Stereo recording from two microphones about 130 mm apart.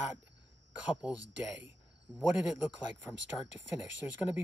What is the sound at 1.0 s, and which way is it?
A man's voice, 10° right (ahead or behind).